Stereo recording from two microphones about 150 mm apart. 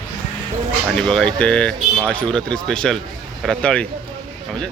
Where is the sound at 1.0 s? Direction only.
5° left (ahead or behind).